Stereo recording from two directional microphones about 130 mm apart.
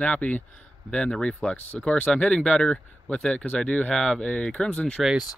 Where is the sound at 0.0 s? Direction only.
10° left (ahead or behind).